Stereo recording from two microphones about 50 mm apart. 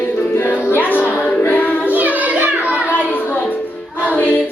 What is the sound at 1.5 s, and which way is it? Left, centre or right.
Singing, left.